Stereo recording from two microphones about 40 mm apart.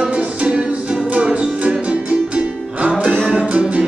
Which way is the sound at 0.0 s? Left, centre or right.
Right.